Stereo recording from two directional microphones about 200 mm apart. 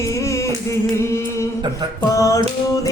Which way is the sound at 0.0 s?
15° left (ahead or behind).